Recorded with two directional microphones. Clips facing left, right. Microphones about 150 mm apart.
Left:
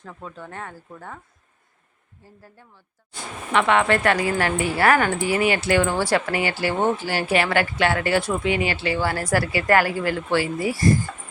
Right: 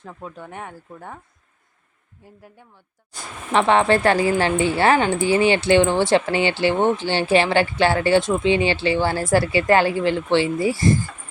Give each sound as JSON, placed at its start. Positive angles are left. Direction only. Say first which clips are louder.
{"t": 0.0, "sound": "speech", "louder": "right 2 dB", "side_deg": -10}
{"t": 2.4, "sound": "speech", "louder": "right 2 dB", "side_deg": -15}
{"t": 3.1, "sound": "speech", "louder": "right 2 dB", "side_deg": -30}